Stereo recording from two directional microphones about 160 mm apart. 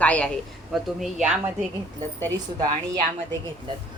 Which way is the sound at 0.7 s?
5° right (ahead or behind).